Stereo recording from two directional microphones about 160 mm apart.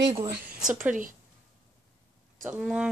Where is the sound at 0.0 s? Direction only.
25° right (ahead or behind).